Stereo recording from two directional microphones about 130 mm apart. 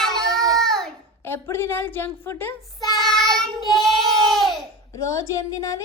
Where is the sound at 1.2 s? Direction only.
20° left (ahead or behind).